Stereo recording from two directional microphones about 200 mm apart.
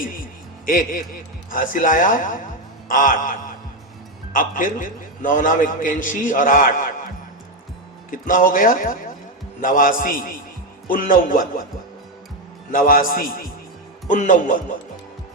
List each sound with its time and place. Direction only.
0.6 s a man's voice: 45° left (ahead or behind)
8.1 s a man's voice: 40° left (ahead or behind)
12.7 s a man's voice: 45° left (ahead or behind)